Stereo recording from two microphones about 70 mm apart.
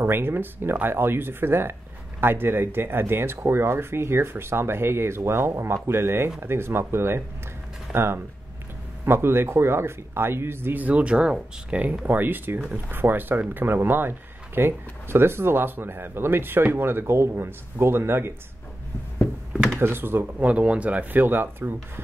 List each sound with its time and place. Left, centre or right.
0.0 s speech: right
19.8 s speech: right
20.3 s speech: centre